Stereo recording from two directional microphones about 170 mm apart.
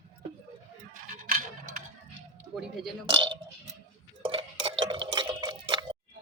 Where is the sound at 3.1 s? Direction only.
30° right (ahead or behind).